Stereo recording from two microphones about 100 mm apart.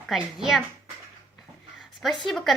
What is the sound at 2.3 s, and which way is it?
Speech, 5° left (ahead or behind).